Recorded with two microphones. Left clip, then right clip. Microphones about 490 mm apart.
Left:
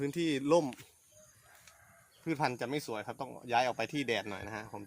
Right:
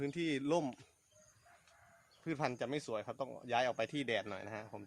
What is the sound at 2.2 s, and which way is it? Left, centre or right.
Speech, right.